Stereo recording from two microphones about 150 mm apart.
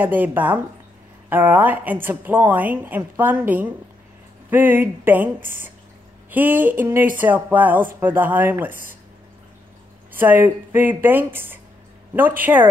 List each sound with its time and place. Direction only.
0.0 s a woman's voice: 10° right (ahead or behind)
5.4 s speech: 70° right (ahead or behind)
6.3 s a woman's voice: 10° right (ahead or behind)
10.1 s a woman's voice: 15° right (ahead or behind)